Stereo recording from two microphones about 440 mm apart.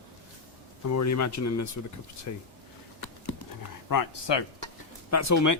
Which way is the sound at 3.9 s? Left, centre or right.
Left.